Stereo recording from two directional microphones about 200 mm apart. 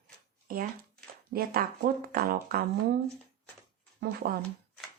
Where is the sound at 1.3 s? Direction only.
50° right (ahead or behind).